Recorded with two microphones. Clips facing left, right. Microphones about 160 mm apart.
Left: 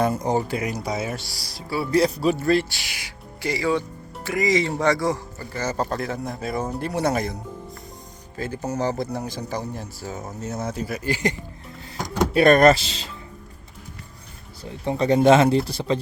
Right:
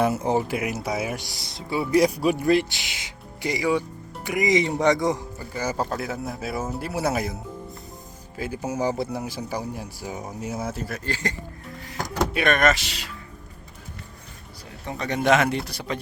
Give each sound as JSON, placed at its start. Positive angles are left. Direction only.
{"t": 0.0, "sound": "speech", "side_deg": -5}
{"t": 8.4, "sound": "speech", "side_deg": -10}
{"t": 11.0, "sound": "speech", "side_deg": 15}
{"t": 12.3, "sound": "speech", "side_deg": 35}
{"t": 14.6, "sound": "speech", "side_deg": 30}